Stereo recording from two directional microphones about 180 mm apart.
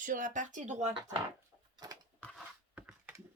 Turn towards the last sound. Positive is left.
turn(degrees=-10)  # may be behind; listen again after turning